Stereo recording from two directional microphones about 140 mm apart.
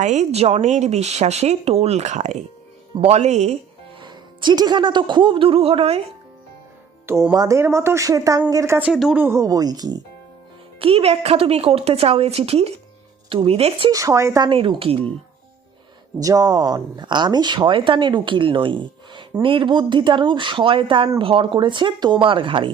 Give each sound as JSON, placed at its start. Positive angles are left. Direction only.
{"t": 0.0, "sound": "speech", "side_deg": -55}
{"t": 4.0, "sound": "speech", "side_deg": -35}
{"t": 7.1, "sound": "speech", "side_deg": -15}
{"t": 8.9, "sound": "a woman's voice", "side_deg": 0}
{"t": 9.1, "sound": "speech", "side_deg": -15}
{"t": 10.8, "sound": "speech", "side_deg": -40}
{"t": 13.9, "sound": "speech", "side_deg": -25}
{"t": 14.5, "sound": "speech", "side_deg": -40}
{"t": 16.2, "sound": "speech", "side_deg": -25}